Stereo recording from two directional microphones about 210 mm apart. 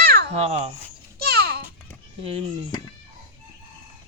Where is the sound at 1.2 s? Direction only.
50° right (ahead or behind).